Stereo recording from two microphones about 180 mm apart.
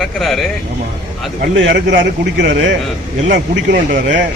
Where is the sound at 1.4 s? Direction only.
70° right (ahead or behind).